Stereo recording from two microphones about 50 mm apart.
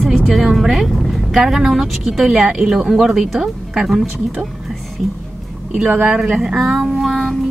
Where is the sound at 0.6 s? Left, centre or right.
Centre.